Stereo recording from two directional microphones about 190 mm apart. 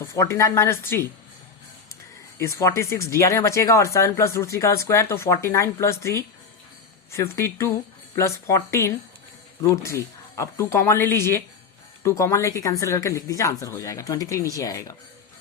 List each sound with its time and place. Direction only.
0.1 s a woman's voice: 15° left (ahead or behind)
2.4 s a woman's voice: 15° left (ahead or behind)